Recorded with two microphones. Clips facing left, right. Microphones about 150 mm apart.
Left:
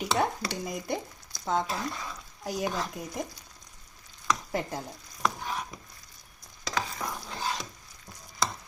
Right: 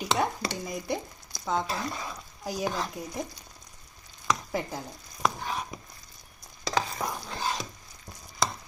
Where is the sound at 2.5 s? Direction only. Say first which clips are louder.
Even; centre (ahead or behind).